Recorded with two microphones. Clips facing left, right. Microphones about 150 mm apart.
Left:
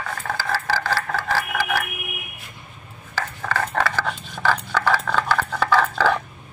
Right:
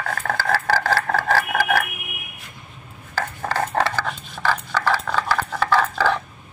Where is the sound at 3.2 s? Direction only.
35° right (ahead or behind).